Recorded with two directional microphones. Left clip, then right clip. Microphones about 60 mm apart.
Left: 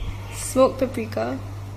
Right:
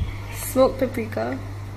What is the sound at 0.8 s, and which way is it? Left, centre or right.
Speech, left.